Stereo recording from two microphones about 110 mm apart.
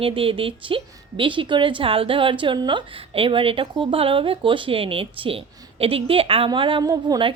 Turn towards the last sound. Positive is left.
turn(degrees=-35)  # may be behind; listen again after turning